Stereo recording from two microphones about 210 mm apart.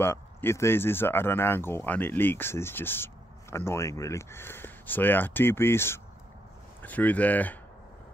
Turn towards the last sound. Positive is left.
turn(degrees=5)  # may be behind; listen again after turning